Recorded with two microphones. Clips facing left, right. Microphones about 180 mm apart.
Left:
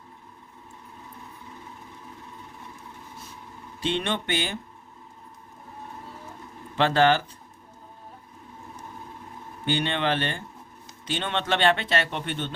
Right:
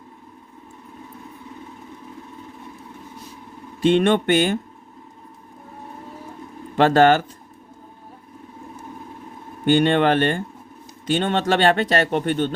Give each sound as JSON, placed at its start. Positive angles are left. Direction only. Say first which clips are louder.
{"t": 3.8, "sound": "speech", "louder": "right 11 dB", "side_deg": -50}
{"t": 6.7, "sound": "speech", "louder": "right 6 dB", "side_deg": -45}
{"t": 9.6, "sound": "speech", "louder": "right 9 dB", "side_deg": -50}